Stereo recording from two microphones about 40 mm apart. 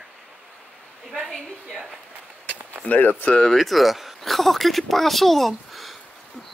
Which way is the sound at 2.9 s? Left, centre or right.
Left.